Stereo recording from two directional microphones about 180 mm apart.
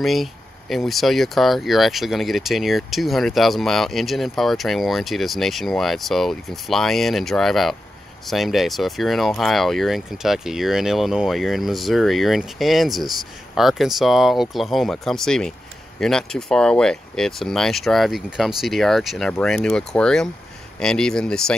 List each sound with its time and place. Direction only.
0.0 s speech: centre (ahead or behind)